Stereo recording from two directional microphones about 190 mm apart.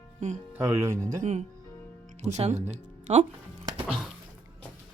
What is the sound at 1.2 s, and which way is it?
Speech, 40° right (ahead or behind).